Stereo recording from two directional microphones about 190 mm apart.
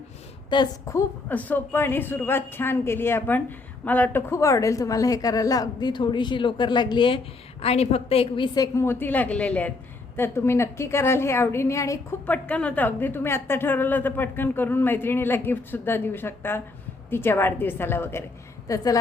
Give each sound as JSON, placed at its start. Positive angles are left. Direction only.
{"t": 0.5, "sound": "a woman's voice", "side_deg": 20}